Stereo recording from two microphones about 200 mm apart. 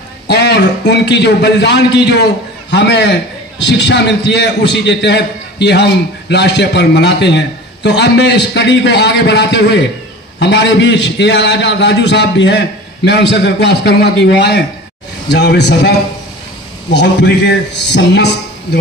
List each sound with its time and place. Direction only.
0.3 s a man's voice: 55° left (ahead or behind)
16.9 s a man's voice: 60° left (ahead or behind)